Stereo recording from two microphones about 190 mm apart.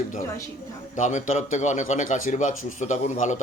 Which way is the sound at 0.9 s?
40° left (ahead or behind).